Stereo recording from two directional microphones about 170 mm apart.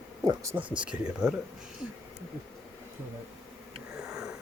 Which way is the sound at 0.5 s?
20° right (ahead or behind).